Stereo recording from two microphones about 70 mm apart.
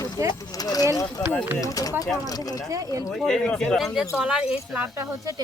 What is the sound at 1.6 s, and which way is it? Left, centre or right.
Speech, left.